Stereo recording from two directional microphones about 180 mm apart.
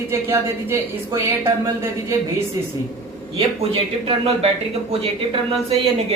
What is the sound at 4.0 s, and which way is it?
Speech, 30° right (ahead or behind).